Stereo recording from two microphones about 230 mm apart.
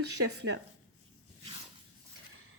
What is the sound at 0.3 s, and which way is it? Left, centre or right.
Speech, right.